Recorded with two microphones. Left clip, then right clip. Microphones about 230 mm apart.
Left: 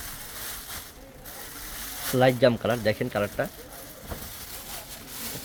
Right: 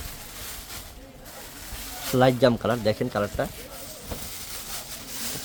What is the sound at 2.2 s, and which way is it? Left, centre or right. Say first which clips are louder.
Speech: right 1 dB; centre.